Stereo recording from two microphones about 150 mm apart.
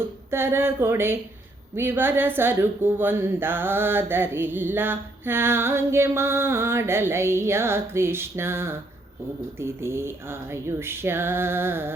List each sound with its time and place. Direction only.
0.3 s speech: 15° right (ahead or behind)